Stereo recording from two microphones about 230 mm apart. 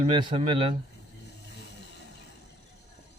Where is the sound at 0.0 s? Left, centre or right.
Right.